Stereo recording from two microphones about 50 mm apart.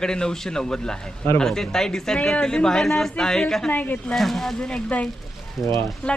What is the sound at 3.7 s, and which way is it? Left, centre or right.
Speech, left.